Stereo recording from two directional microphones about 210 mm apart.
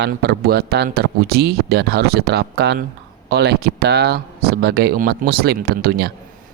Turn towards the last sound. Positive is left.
turn(degrees=-45)  # may be behind; listen again after turning